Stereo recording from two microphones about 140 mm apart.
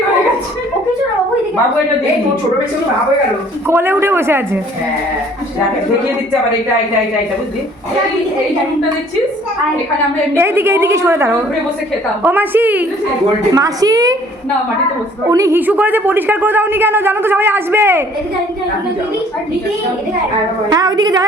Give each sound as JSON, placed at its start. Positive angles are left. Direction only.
{"t": 3.7, "sound": "a man's voice", "side_deg": -15}
{"t": 10.3, "sound": "a man's voice", "side_deg": -15}
{"t": 13.5, "sound": "a woman's voice", "side_deg": -25}
{"t": 15.3, "sound": "a woman's voice", "side_deg": -25}
{"t": 15.6, "sound": "a man's voice", "side_deg": -10}
{"t": 20.7, "sound": "a woman's voice", "side_deg": -30}